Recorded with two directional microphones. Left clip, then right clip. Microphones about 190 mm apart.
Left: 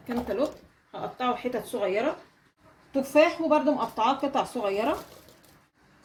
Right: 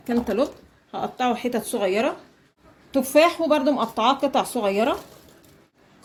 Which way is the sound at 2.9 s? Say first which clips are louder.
Right 4 dB; 45° right (ahead or behind).